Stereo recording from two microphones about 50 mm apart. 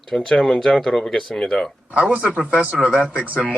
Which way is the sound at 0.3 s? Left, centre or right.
Left.